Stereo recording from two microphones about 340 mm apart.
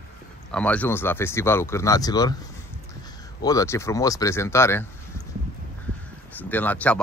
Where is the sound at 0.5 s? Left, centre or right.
Centre.